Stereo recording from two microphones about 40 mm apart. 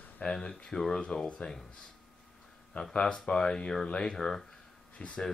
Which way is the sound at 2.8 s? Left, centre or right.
Left.